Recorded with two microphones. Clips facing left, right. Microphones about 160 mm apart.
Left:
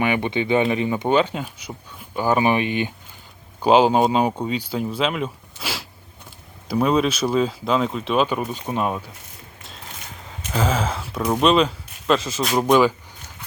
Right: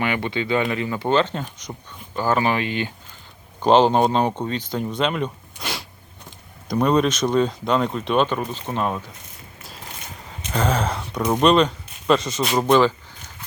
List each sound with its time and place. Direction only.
0.0 s speech: 15° left (ahead or behind)
10.5 s speech: 5° left (ahead or behind)